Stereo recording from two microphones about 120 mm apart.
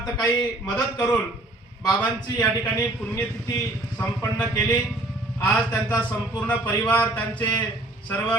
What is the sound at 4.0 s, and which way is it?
Speech, 20° left (ahead or behind).